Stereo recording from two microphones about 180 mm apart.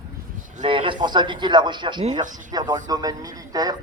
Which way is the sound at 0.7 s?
30° right (ahead or behind).